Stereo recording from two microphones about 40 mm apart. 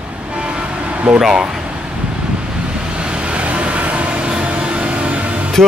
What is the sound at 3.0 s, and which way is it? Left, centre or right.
Vehicle, right.